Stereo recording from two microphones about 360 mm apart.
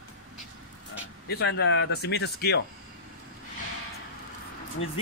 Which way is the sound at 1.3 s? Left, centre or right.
Left.